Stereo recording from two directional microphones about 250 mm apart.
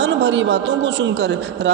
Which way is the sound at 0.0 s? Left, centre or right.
Right.